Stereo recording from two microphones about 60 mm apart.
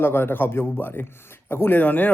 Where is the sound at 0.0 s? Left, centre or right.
Left.